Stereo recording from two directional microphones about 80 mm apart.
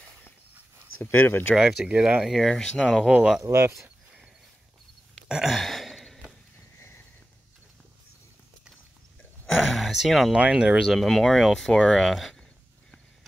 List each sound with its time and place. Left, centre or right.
1.1 s speech: left
1.5 s speech: centre
1.9 s speech: centre
3.5 s speech: right
5.3 s a sound: centre
9.6 s a sound: centre
10.3 s speech: centre